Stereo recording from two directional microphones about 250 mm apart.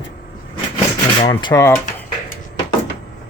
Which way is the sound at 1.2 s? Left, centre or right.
Centre.